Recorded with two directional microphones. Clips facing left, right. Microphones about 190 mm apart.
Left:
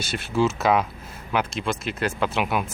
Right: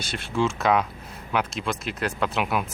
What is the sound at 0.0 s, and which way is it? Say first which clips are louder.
Speech: left 3 dB; 5° left (ahead or behind).